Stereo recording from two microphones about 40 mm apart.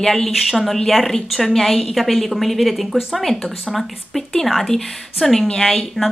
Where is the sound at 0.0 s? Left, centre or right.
Centre.